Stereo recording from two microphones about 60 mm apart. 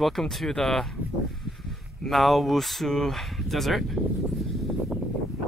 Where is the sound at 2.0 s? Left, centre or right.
Centre.